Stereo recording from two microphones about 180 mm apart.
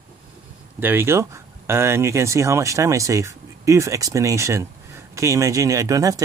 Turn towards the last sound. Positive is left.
turn(degrees=-20)  # may be behind; listen again after turning